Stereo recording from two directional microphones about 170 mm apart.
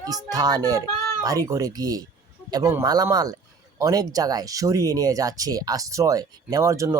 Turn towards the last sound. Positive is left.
turn(degrees=-20)  # may be behind; listen again after turning